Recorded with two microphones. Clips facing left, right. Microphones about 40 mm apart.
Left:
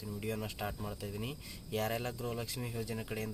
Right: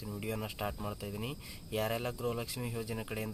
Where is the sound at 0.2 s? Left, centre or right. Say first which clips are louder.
Right 1 dB; centre.